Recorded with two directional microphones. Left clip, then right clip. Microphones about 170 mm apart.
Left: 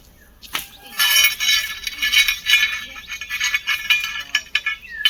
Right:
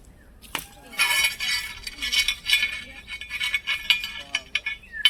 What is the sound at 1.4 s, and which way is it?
Chink, 45° right (ahead or behind).